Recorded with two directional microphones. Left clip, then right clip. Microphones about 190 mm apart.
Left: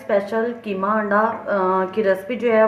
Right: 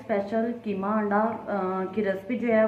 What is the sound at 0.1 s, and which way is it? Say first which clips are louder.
A woman's voice: left 7 dB; 55° left (ahead or behind).